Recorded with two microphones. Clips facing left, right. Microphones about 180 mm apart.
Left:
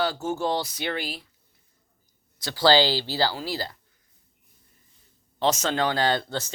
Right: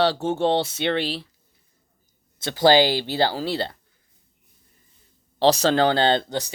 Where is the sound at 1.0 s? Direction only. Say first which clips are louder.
Right 7 dB; 80° right.